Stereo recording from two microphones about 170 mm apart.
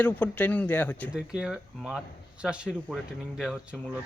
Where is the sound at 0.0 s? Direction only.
10° left (ahead or behind).